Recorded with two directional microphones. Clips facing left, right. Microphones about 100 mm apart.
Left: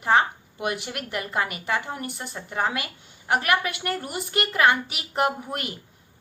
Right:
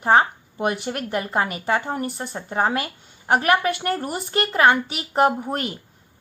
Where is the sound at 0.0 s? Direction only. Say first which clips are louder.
Right 4 dB; 35° right (ahead or behind).